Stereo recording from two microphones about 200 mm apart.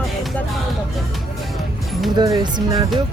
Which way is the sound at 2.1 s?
20° right (ahead or behind).